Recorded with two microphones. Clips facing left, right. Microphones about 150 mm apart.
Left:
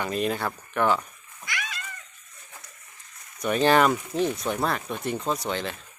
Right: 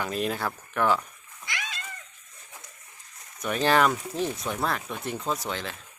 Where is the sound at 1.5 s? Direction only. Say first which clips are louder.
Left 2 dB; 25° right (ahead or behind).